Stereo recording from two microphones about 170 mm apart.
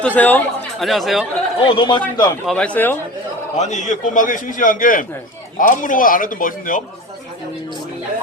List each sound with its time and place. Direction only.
0.0 s speech: 10° left (ahead or behind)
1.6 s a man's voice: 30° left (ahead or behind)
2.5 s speech: 5° left (ahead or behind)
3.6 s a man's voice: 45° left (ahead or behind)